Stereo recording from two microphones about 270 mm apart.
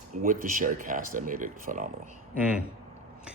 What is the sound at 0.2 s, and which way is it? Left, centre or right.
Speech, right.